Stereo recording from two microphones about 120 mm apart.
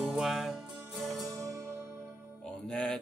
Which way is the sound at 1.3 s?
25° right (ahead or behind).